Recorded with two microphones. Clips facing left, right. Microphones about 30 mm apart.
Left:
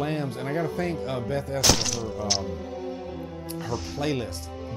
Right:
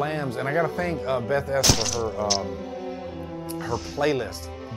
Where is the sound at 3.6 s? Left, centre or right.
Centre.